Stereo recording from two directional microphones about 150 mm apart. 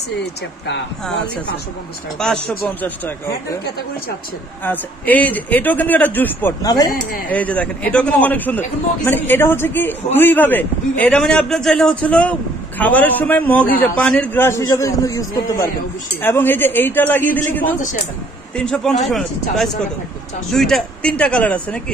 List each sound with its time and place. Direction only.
1.0 s a man's voice: 10° left (ahead or behind)
4.6 s a man's voice: 10° left (ahead or behind)
6.6 s speech: 25° left (ahead or behind)
6.9 s speech: 75° left (ahead or behind)
7.2 s a man's voice: 10° left (ahead or behind)